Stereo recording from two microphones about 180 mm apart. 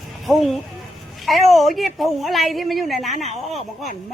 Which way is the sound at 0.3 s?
Centre (ahead or behind).